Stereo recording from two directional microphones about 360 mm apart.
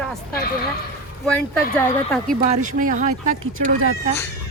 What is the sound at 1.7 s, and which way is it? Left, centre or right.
Speech, centre.